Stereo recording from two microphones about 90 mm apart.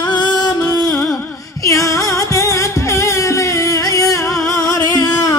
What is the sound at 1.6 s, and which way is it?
Music, 35° left (ahead or behind).